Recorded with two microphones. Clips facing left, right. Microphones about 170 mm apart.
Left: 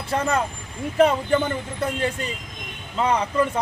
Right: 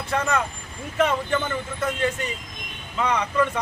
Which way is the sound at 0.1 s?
30° left (ahead or behind).